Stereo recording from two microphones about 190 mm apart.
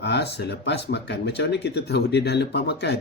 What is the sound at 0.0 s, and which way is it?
Speech, 60° left (ahead or behind).